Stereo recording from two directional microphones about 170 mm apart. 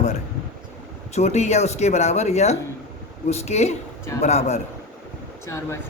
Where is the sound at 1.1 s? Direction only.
40° left (ahead or behind).